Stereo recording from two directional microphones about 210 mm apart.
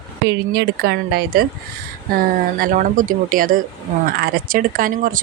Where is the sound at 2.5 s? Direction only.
40° right (ahead or behind).